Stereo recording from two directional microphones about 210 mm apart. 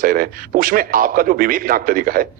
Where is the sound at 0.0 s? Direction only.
40° right (ahead or behind).